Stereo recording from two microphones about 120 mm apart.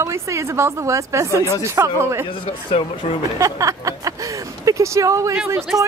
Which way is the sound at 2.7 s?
55° left (ahead or behind).